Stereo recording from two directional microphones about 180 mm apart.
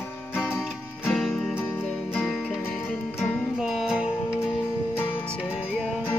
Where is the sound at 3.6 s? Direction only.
5° right (ahead or behind).